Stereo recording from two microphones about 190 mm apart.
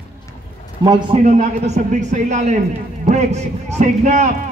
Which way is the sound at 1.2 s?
40° right (ahead or behind).